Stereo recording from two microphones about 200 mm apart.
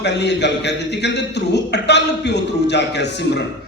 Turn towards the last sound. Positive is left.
turn(degrees=60)  # may be behind; listen again after turning